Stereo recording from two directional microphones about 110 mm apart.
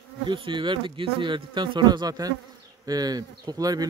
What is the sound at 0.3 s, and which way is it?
Speech, 45° right (ahead or behind).